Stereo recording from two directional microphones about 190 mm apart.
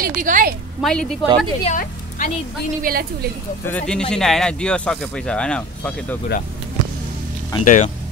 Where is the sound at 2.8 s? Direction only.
50° right (ahead or behind).